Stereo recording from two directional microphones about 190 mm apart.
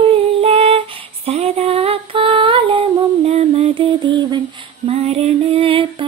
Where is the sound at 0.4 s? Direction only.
30° right (ahead or behind).